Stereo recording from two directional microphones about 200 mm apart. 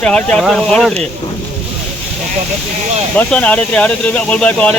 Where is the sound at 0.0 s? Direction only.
5° left (ahead or behind).